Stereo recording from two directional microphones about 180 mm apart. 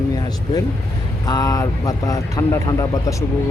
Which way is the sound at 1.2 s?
20° left (ahead or behind).